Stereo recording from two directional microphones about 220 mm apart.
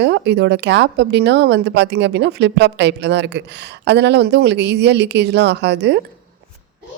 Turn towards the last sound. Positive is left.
turn(degrees=-50)  # may be behind; listen again after turning